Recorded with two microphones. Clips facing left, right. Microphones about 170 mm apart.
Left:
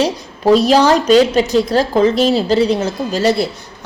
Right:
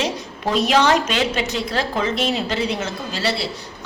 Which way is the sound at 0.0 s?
35° left (ahead or behind).